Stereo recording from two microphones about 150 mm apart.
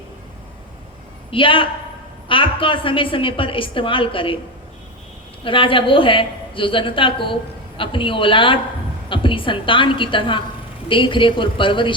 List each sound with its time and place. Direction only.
1.3 s a woman's voice: 35° left (ahead or behind)
5.4 s a woman's voice: 35° left (ahead or behind)